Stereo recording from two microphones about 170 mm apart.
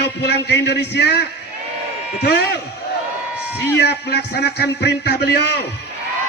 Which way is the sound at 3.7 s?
75° left (ahead or behind).